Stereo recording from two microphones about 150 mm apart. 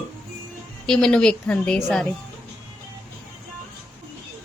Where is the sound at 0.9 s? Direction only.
5° left (ahead or behind).